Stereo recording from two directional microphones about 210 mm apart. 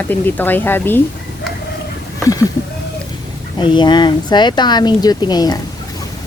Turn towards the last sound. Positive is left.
turn(degrees=20)  # may be behind; listen again after turning